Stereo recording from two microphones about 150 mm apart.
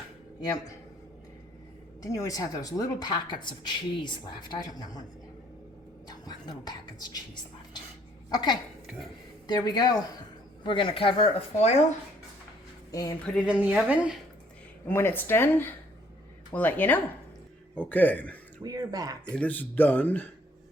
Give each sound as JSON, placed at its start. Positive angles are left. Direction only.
{"t": 2.0, "sound": "speech", "side_deg": 20}
{"t": 6.1, "sound": "speech", "side_deg": 25}
{"t": 8.3, "sound": "a woman's voice", "side_deg": 25}
{"t": 12.9, "sound": "speech", "side_deg": 20}
{"t": 13.4, "sound": "speech", "side_deg": -5}
{"t": 14.8, "sound": "speech", "side_deg": 15}
{"t": 18.6, "sound": "speech", "side_deg": -25}
{"t": 19.3, "sound": "speech", "side_deg": 10}